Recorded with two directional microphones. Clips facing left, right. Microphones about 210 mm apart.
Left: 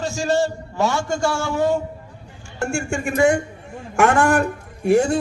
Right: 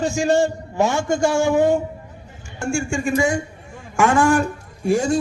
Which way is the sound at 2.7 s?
65° left (ahead or behind).